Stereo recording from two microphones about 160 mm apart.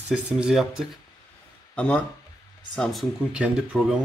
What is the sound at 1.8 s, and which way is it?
Speech, 5° left (ahead or behind).